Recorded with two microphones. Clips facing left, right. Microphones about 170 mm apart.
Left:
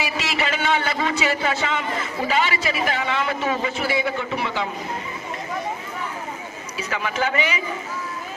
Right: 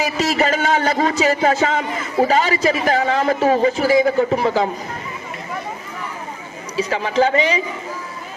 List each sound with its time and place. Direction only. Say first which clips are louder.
0.0 s a man's voice: right 7 dB; 40° right (ahead or behind)
6.7 s a man's voice: right 8 dB; 30° right (ahead or behind)